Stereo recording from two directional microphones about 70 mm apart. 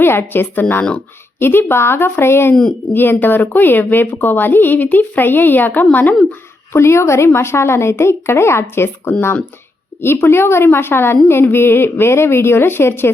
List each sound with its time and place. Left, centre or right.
0.0 s speech: left
1.4 s a woman's voice: left
6.7 s a woman's voice: left
10.2 s a woman's voice: left